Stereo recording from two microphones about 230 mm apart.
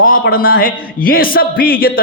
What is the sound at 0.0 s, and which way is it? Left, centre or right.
A man's voice, left.